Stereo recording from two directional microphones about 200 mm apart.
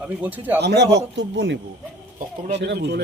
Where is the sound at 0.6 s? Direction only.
55° right (ahead or behind).